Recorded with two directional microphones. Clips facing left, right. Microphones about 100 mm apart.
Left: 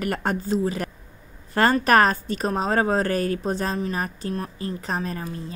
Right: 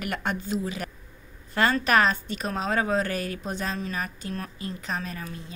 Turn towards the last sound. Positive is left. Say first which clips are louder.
# left 5 dB
turn(degrees=35)  # may be behind; listen again after turning